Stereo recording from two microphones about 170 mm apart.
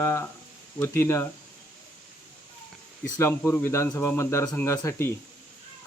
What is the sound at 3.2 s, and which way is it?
Speech, 15° left (ahead or behind).